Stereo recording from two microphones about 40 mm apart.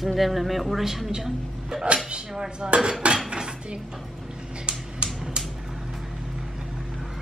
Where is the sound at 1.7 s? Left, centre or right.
Centre.